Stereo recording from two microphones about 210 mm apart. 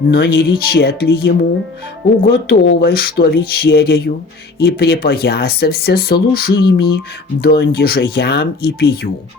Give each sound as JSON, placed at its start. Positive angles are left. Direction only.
{"t": 0.1, "sound": "speech", "side_deg": 50}